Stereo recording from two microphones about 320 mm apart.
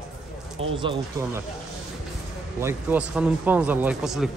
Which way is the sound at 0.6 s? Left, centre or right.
Centre.